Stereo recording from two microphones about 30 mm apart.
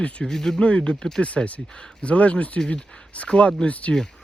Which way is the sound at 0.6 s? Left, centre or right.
Left.